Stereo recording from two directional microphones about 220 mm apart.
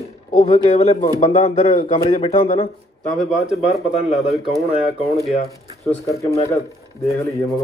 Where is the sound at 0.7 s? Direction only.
25° left (ahead or behind).